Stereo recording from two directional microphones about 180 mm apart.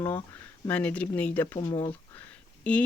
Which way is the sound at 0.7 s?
10° left (ahead or behind).